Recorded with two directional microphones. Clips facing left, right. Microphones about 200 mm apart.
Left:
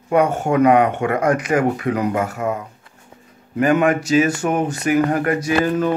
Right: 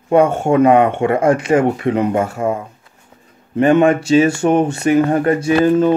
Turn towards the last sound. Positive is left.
turn(degrees=-25)  # may be behind; listen again after turning